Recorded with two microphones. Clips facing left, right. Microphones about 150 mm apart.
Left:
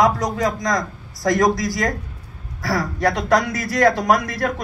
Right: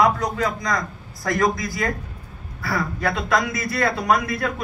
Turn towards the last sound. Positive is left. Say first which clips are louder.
# left 4 dB
turn(degrees=90)